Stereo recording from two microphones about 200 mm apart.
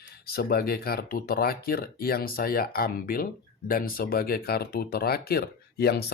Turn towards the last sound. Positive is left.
turn(degrees=50)  # may be behind; listen again after turning